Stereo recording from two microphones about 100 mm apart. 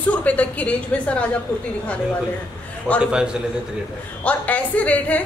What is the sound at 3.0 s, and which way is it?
Speech, 10° right (ahead or behind).